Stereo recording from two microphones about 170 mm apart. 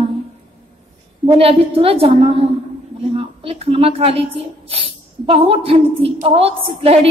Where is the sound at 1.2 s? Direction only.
35° right (ahead or behind).